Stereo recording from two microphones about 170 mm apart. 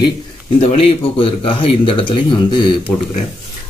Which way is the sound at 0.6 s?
35° left (ahead or behind).